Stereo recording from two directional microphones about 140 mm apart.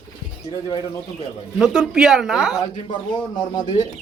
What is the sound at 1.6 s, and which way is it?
Speech, 5° right (ahead or behind).